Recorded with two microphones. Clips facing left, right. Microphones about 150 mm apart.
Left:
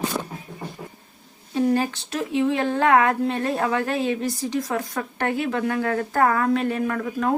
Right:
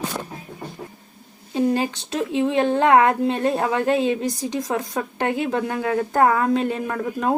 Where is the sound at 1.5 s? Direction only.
20° right (ahead or behind).